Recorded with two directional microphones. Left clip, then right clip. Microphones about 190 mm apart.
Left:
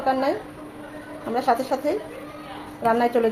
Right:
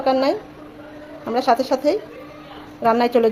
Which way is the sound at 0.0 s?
40° right (ahead or behind).